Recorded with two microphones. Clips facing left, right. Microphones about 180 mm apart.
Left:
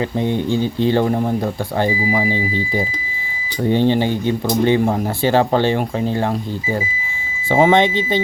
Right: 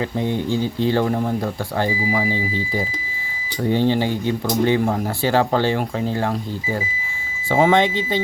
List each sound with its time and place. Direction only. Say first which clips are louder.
0.5 s speech: left 3 dB; 20° left (ahead or behind)
7.5 s speech: left 3 dB; 20° left (ahead or behind)